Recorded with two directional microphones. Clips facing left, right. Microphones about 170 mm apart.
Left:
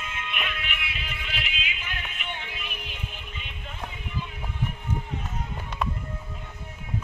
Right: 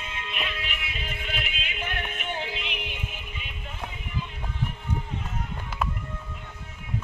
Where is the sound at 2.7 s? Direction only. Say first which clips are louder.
Right 4 dB; 70° right (ahead or behind).